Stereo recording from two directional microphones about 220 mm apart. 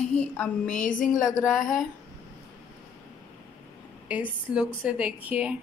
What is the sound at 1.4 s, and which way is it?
Speech, centre (ahead or behind).